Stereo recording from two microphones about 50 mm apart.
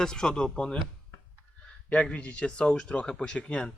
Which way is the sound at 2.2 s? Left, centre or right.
Centre.